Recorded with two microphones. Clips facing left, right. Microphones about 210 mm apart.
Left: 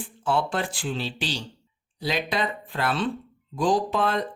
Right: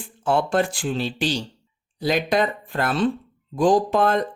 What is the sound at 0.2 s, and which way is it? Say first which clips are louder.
Speech: right 5 dB; 45° right (ahead or behind).